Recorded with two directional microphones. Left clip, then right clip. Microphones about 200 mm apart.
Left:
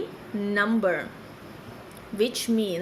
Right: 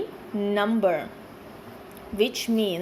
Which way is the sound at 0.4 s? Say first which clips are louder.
Right 1 dB; 10° right (ahead or behind).